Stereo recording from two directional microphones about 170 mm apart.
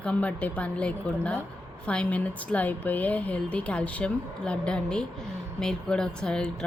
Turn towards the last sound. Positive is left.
turn(degrees=5)  # may be behind; listen again after turning